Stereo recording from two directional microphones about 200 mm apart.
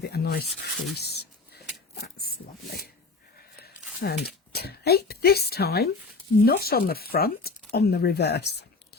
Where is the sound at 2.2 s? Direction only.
50° left (ahead or behind).